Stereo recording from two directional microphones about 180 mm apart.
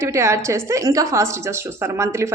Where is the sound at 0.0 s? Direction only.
15° right (ahead or behind).